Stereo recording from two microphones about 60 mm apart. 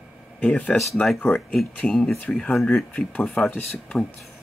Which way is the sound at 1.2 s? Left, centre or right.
Left.